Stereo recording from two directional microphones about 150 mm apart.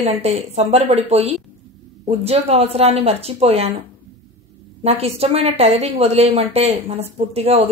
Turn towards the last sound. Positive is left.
turn(degrees=-45)  # may be behind; listen again after turning